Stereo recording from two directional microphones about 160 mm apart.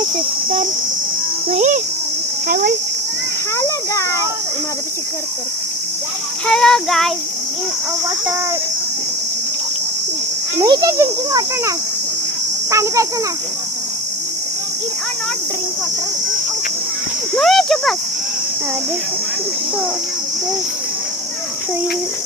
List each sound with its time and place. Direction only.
1.5 s a sound: 50° right (ahead or behind)
2.5 s speech: 60° right (ahead or behind)
3.6 s a sound: 20° left (ahead or behind)
6.5 s child singing: 5° left (ahead or behind)
10.6 s speech: 25° right (ahead or behind)
12.7 s speech: 20° right (ahead or behind)
17.3 s child singing: centre (ahead or behind)